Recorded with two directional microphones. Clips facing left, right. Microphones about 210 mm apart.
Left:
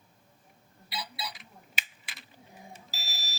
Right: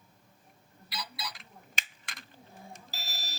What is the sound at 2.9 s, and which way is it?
Smoke detector, 50° right (ahead or behind).